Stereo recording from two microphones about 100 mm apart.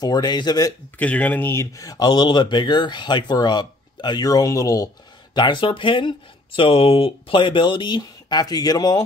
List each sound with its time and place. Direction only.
0.0 s speech: 45° left (ahead or behind)
0.9 s speech: 15° left (ahead or behind); by 4.8 s 35° left (ahead or behind)
5.3 s speech: 55° left (ahead or behind)